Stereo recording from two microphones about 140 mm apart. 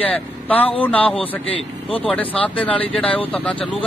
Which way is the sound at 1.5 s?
40° left (ahead or behind).